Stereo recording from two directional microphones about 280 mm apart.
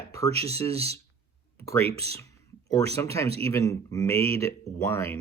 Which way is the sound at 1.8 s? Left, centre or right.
Right.